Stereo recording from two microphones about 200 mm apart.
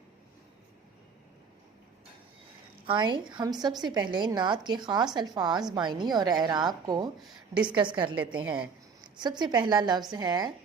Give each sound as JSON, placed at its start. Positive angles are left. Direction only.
{"t": 2.8, "sound": "a woman's voice", "side_deg": -25}
{"t": 7.2, "sound": "a woman's voice", "side_deg": -5}
{"t": 7.8, "sound": "a woman's voice", "side_deg": -25}
{"t": 8.4, "sound": "speech", "side_deg": -5}
{"t": 9.1, "sound": "a woman's voice", "side_deg": -20}